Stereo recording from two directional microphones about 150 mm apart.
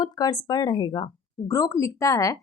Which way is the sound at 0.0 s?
25° left (ahead or behind).